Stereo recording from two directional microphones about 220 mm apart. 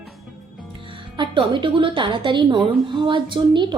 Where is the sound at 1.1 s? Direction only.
20° right (ahead or behind).